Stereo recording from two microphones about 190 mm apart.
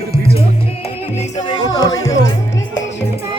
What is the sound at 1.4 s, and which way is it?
Music, 20° left (ahead or behind).